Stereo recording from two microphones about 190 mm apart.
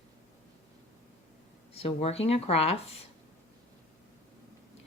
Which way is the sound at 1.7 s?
30° left (ahead or behind).